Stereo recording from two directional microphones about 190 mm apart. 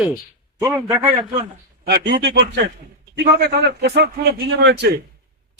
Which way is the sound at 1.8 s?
60° right (ahead or behind).